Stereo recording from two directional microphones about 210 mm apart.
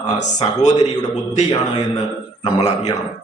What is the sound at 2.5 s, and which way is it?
Speech, 30° left (ahead or behind).